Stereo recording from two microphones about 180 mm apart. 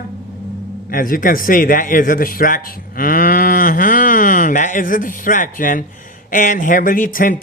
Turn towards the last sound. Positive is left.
turn(degrees=50)  # may be behind; listen again after turning